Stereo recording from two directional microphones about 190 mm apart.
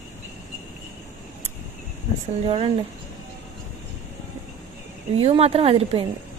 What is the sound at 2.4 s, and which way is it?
Speech, 30° right (ahead or behind).